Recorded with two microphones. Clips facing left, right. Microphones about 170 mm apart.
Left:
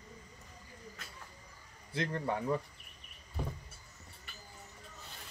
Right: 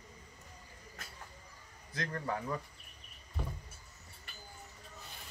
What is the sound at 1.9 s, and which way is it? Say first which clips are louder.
Speech: left 3 dB; 25° left (ahead or behind).